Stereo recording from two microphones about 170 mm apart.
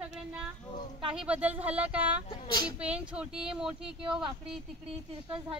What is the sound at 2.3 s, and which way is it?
Speech, 25° left (ahead or behind).